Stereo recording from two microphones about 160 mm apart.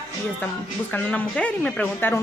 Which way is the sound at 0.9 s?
10° left (ahead or behind).